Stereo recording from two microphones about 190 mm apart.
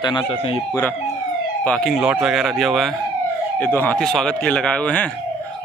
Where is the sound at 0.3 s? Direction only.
30° left (ahead or behind).